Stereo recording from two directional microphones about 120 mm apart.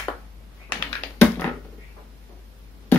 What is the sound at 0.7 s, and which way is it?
Computer keyboard, 15° left (ahead or behind).